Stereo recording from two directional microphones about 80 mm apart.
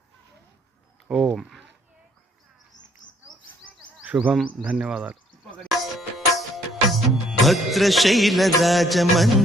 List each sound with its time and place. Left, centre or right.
1.0 s speech: centre
1.4 s speech: centre
4.0 s a man's voice: centre
5.5 s music: centre